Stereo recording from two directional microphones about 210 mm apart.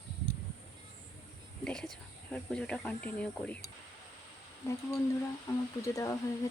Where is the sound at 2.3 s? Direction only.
5° left (ahead or behind).